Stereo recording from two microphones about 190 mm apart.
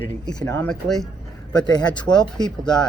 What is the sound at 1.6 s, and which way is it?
Speech, 20° left (ahead or behind).